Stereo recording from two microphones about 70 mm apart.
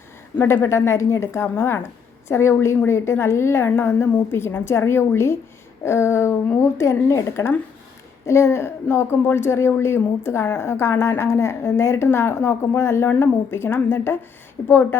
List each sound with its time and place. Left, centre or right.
0.4 s a woman's voice: left